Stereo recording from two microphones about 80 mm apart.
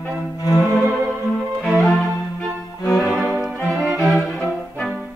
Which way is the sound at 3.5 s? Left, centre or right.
Centre.